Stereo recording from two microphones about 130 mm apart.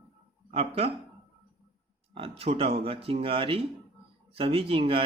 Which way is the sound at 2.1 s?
45° right (ahead or behind).